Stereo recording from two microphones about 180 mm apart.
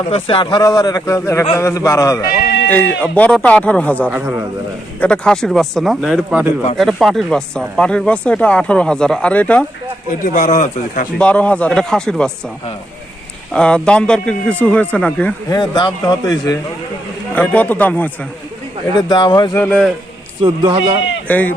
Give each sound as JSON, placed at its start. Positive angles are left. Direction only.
{"t": 0.1, "sound": "a man's voice", "side_deg": 30}
{"t": 4.1, "sound": "a man's voice", "side_deg": -10}
{"t": 4.9, "sound": "speech", "side_deg": 5}
{"t": 10.2, "sound": "speech", "side_deg": 45}
{"t": 11.2, "sound": "speech", "side_deg": 5}
{"t": 13.5, "sound": "speech", "side_deg": 5}
{"t": 15.4, "sound": "a man's voice", "side_deg": 20}
{"t": 17.3, "sound": "speech", "side_deg": 10}
{"t": 18.9, "sound": "a man's voice", "side_deg": 25}
{"t": 19.5, "sound": "speech", "side_deg": 5}
{"t": 20.4, "sound": "a man's voice", "side_deg": -25}
{"t": 21.2, "sound": "speech", "side_deg": 10}